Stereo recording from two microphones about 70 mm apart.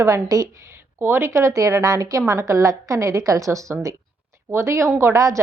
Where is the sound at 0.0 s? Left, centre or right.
Right.